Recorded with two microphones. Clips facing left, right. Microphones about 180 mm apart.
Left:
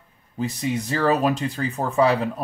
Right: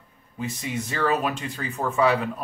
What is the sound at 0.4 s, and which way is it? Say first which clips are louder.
Speech: left 5 dB; 35° left (ahead or behind).